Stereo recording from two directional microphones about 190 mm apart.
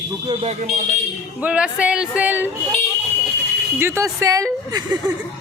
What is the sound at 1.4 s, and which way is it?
Speech, 5° right (ahead or behind).